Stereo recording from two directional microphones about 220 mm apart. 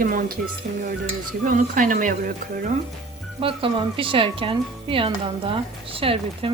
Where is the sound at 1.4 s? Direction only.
35° right (ahead or behind).